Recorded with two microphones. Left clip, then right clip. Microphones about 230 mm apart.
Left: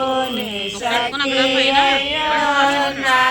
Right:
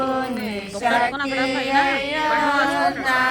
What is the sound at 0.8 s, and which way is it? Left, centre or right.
Chant, left.